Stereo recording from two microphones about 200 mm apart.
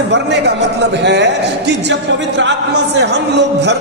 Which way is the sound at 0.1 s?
60° right (ahead or behind).